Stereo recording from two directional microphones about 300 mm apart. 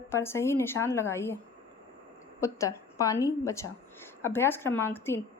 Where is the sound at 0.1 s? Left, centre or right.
Centre.